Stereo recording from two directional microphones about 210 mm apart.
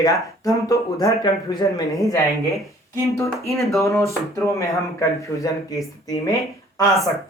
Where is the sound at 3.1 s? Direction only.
10° left (ahead or behind).